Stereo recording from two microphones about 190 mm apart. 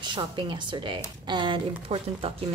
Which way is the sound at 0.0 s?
25° right (ahead or behind).